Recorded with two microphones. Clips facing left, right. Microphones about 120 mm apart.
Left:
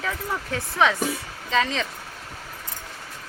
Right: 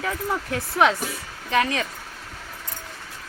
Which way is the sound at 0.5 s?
15° right (ahead or behind).